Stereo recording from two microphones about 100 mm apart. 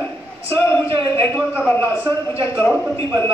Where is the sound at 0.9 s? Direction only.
65° right (ahead or behind).